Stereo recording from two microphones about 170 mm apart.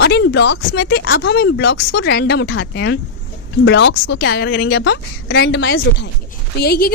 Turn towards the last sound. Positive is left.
turn(degrees=70)  # may be behind; listen again after turning